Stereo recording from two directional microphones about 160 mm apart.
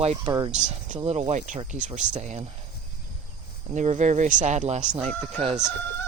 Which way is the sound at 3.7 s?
45° right (ahead or behind).